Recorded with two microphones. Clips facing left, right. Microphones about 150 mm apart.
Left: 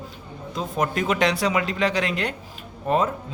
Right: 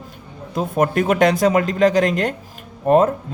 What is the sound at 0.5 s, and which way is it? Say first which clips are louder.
Speech: right 7 dB; 50° right (ahead or behind).